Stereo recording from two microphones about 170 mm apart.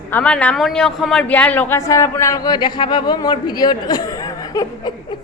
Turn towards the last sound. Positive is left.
turn(degrees=20)  # may be behind; listen again after turning